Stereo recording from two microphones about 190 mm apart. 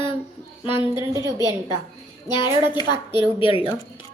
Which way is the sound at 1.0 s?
15° right (ahead or behind).